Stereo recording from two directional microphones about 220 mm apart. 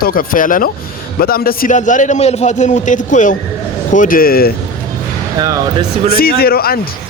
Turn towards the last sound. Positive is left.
turn(degrees=45)  # may be behind; listen again after turning